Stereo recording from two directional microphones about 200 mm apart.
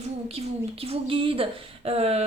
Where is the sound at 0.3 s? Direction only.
30° right (ahead or behind).